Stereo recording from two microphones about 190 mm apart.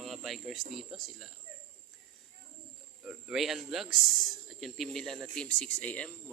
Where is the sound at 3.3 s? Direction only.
Centre (ahead or behind).